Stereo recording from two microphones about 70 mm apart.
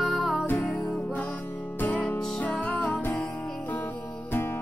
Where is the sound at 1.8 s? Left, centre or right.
Left.